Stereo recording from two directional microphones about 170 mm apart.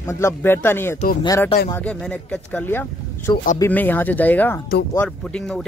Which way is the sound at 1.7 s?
5° left (ahead or behind).